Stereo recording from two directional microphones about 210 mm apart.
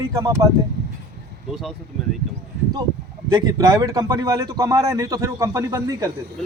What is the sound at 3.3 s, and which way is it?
Speech, 15° right (ahead or behind).